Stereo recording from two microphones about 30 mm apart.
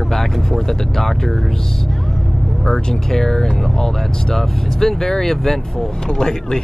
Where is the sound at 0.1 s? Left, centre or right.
Centre.